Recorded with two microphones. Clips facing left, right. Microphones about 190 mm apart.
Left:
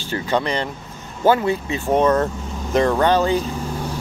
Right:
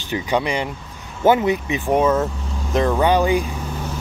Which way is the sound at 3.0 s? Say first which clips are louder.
Even; 10° right (ahead or behind).